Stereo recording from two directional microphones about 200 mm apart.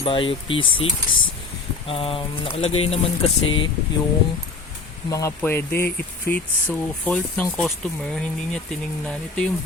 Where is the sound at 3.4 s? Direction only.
75° left (ahead or behind).